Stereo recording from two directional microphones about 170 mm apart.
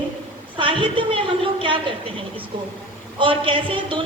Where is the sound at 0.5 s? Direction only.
30° right (ahead or behind).